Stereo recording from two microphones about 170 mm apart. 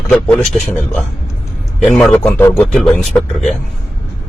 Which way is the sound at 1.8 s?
5° left (ahead or behind).